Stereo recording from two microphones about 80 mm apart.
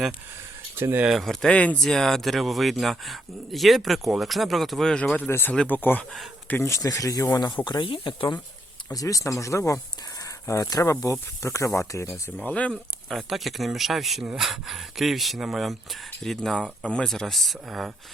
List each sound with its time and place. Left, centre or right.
0.8 s speech: right
1.2 s speech: centre
1.5 s speech: centre
5.5 s speech: left
6.7 s speech: left
7.3 s speech: left
8.9 s speech: left
12.4 s speech: centre
12.7 s speech: centre